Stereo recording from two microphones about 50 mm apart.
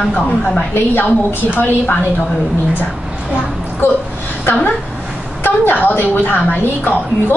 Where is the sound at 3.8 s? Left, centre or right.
Left.